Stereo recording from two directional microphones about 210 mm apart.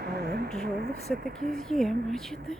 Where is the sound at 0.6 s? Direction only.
45° right (ahead or behind).